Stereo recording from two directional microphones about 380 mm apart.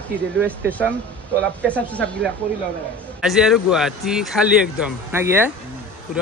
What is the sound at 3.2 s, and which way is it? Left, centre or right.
Speech, centre.